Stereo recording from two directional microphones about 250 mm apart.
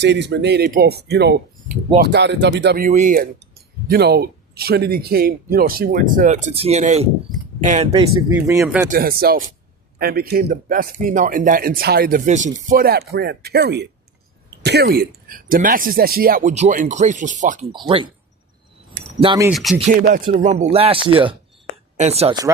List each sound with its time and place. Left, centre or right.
0.0 s speech: right
8.4 s speech: centre
8.9 s speech: right; by 18.1 s centre
19.2 s speech: centre
19.5 s music: centre
19.9 s speech: right; by 22.5 s centre